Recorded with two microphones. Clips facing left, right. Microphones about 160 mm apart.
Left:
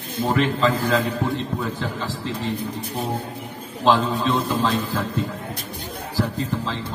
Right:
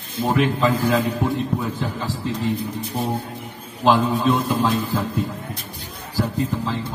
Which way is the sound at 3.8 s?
15° right (ahead or behind).